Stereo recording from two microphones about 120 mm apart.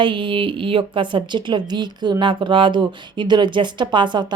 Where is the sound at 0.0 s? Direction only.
45° right (ahead or behind).